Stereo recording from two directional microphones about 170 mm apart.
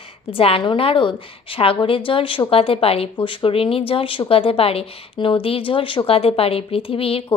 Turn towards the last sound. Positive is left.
turn(degrees=35)  # may be behind; listen again after turning